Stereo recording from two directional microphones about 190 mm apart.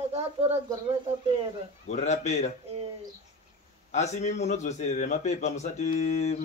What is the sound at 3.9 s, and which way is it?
A man's voice, 35° left (ahead or behind).